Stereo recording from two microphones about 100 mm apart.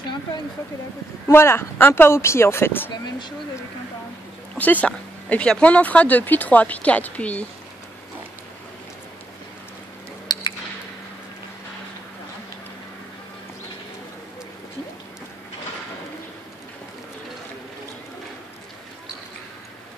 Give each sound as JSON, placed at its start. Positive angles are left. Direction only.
{"t": 1.3, "sound": "speech", "side_deg": 25}
{"t": 2.9, "sound": "speech", "side_deg": 50}
{"t": 4.6, "sound": "speech", "side_deg": 15}
{"t": 10.3, "sound": "a sound", "side_deg": 40}